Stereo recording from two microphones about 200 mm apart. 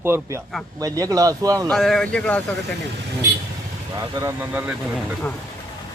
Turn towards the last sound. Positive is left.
turn(degrees=-5)  # may be behind; listen again after turning